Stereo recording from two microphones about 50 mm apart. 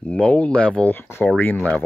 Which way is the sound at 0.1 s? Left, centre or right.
Left.